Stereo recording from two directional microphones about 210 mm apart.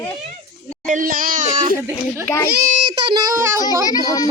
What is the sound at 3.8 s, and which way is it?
Speech, 15° left (ahead or behind).